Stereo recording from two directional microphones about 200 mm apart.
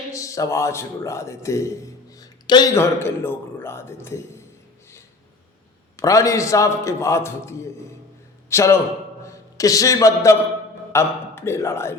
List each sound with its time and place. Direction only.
0.1 s a man's voice: 15° left (ahead or behind)
6.0 s a man's voice: 15° left (ahead or behind)